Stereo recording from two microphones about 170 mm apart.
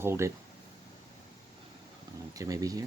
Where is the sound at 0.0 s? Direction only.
15° right (ahead or behind).